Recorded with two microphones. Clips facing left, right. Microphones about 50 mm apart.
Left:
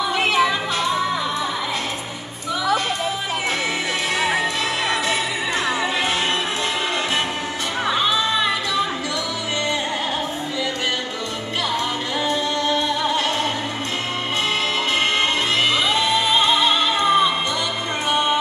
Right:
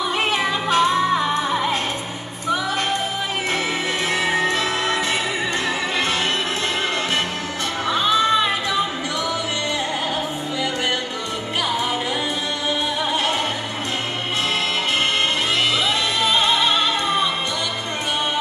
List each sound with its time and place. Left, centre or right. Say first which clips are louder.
0.4 s music: right 1 dB; right
12.6 s music: even; centre
15.9 s music: left 1 dB; centre